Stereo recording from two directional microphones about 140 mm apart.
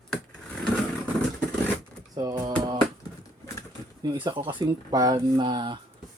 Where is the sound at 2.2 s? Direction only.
25° right (ahead or behind).